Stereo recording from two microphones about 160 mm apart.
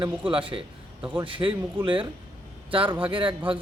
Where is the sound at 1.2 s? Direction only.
35° right (ahead or behind).